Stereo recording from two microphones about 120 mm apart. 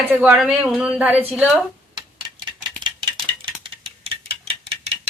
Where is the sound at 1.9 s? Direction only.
40° right (ahead or behind).